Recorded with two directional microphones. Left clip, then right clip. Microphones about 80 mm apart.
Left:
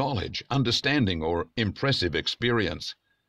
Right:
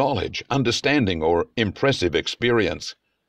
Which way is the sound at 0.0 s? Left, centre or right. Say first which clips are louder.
Right 7 dB; right.